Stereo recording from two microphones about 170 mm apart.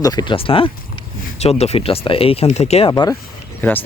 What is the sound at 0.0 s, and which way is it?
Speech, 25° left (ahead or behind).